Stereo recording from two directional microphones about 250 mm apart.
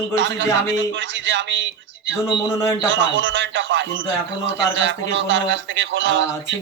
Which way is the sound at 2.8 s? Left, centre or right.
Right.